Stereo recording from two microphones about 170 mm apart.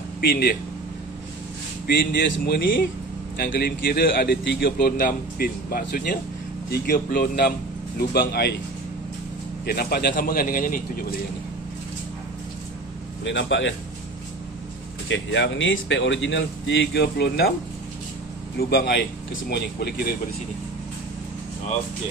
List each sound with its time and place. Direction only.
0.2 s a man's voice: 65° left (ahead or behind)
1.9 s a man's voice: 60° left (ahead or behind)
9.7 s a man's voice: 65° left (ahead or behind)
13.2 s speech: 90° left
15.0 s speech: 90° left; by 17.5 s 75° left (ahead or behind)
18.7 s speech: 75° left (ahead or behind)